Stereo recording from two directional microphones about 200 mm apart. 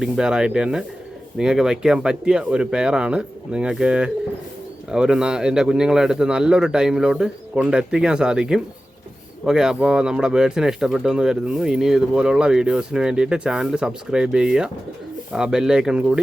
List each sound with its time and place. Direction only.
0.0 s speech: 5° right (ahead or behind)